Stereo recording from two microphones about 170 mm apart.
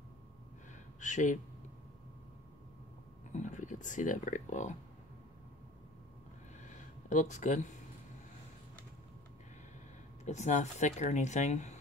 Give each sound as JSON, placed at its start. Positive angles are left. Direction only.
{"t": 1.0, "sound": "speech", "side_deg": 45}
{"t": 3.3, "sound": "speech", "side_deg": 45}
{"t": 6.6, "sound": "a sound", "side_deg": 45}
{"t": 10.2, "sound": "speech", "side_deg": 45}